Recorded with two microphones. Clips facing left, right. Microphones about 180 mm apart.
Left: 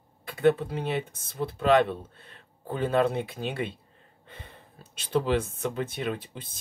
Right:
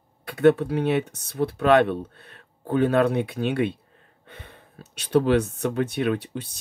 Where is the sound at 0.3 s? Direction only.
70° right (ahead or behind).